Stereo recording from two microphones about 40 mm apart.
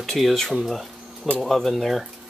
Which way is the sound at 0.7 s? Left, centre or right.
Centre.